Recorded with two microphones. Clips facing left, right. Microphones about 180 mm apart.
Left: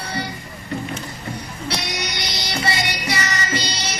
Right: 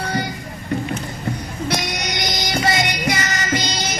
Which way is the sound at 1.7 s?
50° right (ahead or behind).